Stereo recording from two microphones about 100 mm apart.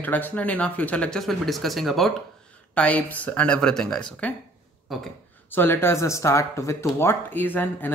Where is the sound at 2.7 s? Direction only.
15° left (ahead or behind).